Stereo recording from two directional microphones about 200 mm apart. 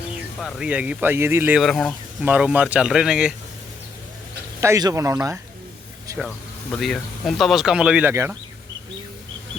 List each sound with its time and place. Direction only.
0.3 s speech: centre (ahead or behind)
4.6 s speech: 15° right (ahead or behind)
6.7 s speech: centre (ahead or behind)